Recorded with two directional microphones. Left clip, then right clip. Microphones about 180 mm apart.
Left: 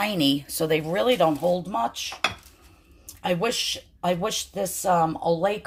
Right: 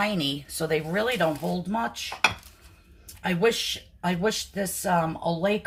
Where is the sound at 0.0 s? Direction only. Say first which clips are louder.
Left 3 dB; 50° left (ahead or behind).